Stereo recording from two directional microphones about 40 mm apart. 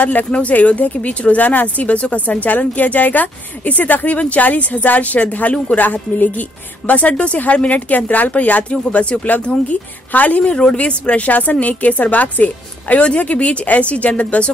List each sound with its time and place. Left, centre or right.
0.0 s a woman's voice: left
1.9 s a woman's voice: left
2.2 s a woman's voice: left
6.9 s a woman's voice: left
9.4 s speech: left
10.1 s a woman's voice: left
10.4 s a woman's voice: left